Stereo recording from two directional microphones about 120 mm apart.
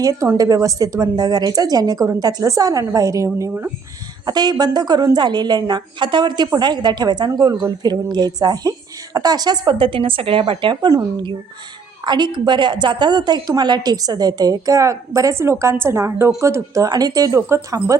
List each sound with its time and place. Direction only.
0.0 s a woman's voice: 30° right (ahead or behind)